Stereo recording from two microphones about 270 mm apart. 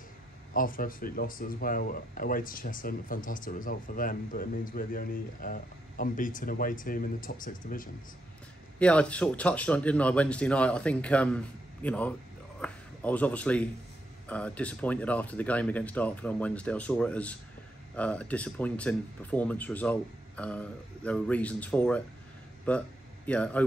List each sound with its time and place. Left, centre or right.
0.5 s speech: left
8.7 s speech: centre